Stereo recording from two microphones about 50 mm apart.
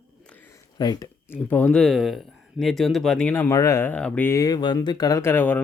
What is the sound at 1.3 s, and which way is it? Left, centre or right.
Speech, left.